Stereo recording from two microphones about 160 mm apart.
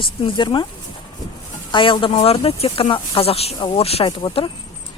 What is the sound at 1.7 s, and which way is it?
Speech, 30° left (ahead or behind).